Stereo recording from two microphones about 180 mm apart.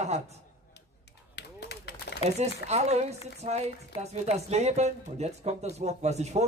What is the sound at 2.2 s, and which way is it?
A man's voice, 35° right (ahead or behind).